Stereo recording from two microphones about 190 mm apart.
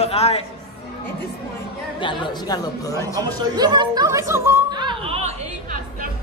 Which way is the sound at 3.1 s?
20° right (ahead or behind).